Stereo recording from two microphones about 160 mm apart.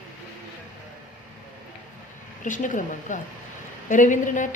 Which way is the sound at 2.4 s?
55° left (ahead or behind).